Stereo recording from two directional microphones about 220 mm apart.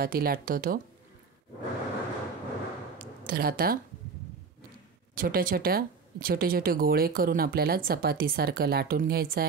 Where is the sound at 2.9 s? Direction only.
40° right (ahead or behind).